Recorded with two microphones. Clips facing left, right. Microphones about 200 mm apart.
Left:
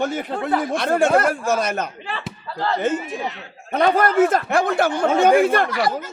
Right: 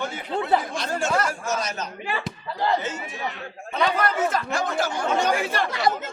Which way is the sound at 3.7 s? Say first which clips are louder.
Left 7 dB; 50° left (ahead or behind).